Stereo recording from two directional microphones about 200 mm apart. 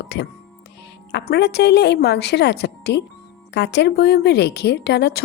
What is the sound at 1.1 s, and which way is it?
A woman's voice, 55° left (ahead or behind).